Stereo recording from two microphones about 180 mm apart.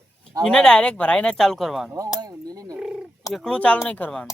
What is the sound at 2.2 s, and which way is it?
Speech, 20° right (ahead or behind).